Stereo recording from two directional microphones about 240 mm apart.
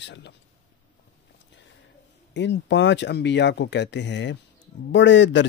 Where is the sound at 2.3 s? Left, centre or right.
Left.